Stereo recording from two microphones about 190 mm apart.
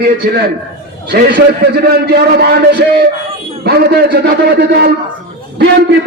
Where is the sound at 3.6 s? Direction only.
55° right (ahead or behind).